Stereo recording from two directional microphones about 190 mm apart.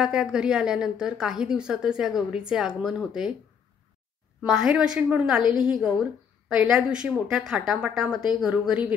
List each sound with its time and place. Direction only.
0.0 s a woman's voice: 5° right (ahead or behind)
4.4 s a woman's voice: 5° right (ahead or behind)
5.4 s a woman's voice: 25° left (ahead or behind)
5.7 s a woman's voice: centre (ahead or behind)